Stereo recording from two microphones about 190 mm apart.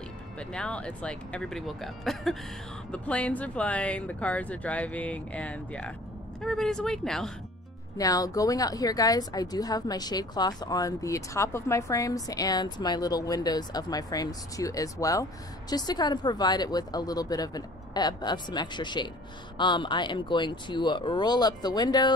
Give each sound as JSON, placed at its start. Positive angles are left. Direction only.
{"t": 0.4, "sound": "speech", "side_deg": 5}
{"t": 8.0, "sound": "a woman's voice", "side_deg": 20}